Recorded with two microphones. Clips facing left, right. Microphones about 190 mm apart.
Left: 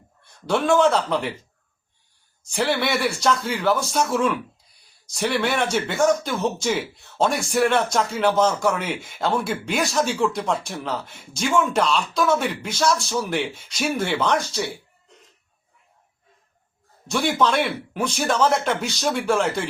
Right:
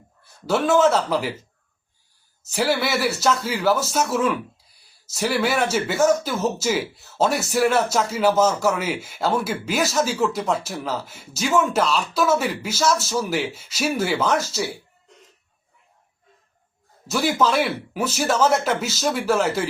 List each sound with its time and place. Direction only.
0.4 s speech: 5° right (ahead or behind)
2.4 s speech: 5° right (ahead or behind)
17.1 s speech: 5° right (ahead or behind)